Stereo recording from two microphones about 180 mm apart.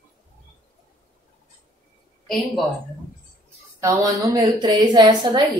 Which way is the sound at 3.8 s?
15° right (ahead or behind).